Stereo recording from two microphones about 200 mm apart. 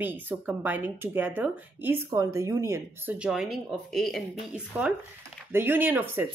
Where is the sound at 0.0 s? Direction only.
10° right (ahead or behind).